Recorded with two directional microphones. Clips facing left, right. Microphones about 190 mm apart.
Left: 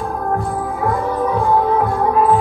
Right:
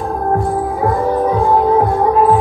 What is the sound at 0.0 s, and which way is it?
Music, 35° right (ahead or behind).